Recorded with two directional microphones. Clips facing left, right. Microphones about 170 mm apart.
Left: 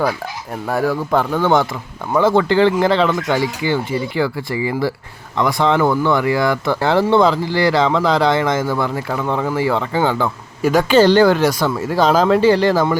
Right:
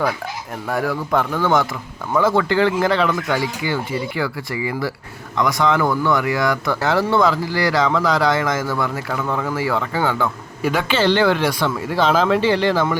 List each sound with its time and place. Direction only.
0.7 s speech: 30° left (ahead or behind)
10.6 s speech: 40° left (ahead or behind)